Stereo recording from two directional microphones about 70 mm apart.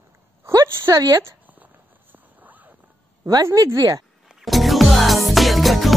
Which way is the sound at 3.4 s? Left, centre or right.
Right.